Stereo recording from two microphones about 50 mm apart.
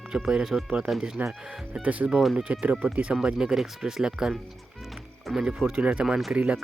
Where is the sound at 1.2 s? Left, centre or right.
Right.